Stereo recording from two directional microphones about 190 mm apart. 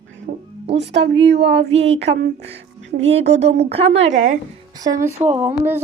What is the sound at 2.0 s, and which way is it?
Speech, 60° right (ahead or behind).